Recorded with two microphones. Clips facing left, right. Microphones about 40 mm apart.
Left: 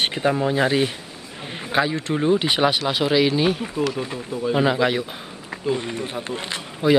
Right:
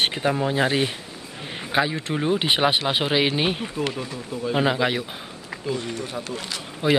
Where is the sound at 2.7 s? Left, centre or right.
Right.